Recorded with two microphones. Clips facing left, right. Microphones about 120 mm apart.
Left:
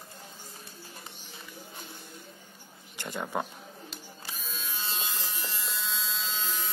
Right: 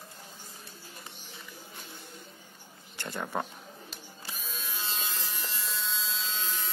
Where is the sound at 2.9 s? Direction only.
15° left (ahead or behind).